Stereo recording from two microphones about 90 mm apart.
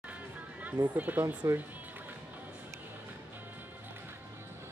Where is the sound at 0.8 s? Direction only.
20° right (ahead or behind).